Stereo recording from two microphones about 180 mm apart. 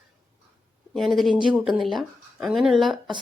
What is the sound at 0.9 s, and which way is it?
Speech, centre (ahead or behind).